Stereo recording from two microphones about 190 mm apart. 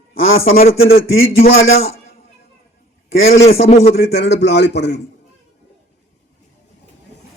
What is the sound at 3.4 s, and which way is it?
Speech, 35° left (ahead or behind).